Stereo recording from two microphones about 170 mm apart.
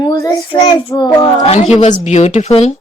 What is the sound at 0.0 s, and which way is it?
Child singing, 25° left (ahead or behind).